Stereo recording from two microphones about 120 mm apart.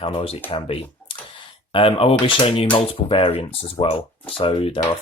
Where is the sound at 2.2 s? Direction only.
45° left (ahead or behind).